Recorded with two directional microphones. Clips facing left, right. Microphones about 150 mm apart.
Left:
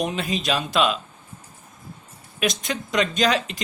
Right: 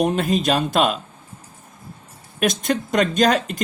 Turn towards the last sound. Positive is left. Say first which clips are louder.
# right 4 dB
turn(degrees=-45)  # may be behind; listen again after turning